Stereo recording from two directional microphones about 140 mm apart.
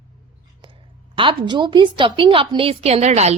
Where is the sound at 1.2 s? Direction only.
35° right (ahead or behind); by 3.3 s 50° right (ahead or behind).